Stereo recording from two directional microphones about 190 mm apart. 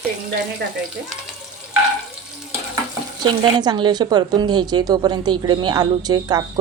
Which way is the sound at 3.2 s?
20° right (ahead or behind).